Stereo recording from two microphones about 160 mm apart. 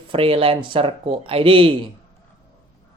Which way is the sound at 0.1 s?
35° right (ahead or behind).